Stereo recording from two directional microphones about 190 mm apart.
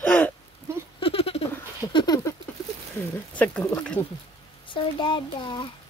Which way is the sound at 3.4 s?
5° left (ahead or behind).